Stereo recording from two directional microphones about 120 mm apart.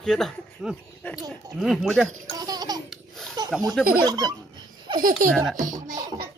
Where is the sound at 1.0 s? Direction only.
15° left (ahead or behind).